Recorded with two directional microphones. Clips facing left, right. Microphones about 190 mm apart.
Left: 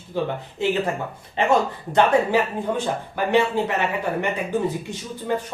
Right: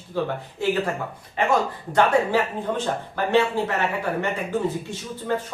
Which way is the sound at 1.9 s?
15° left (ahead or behind).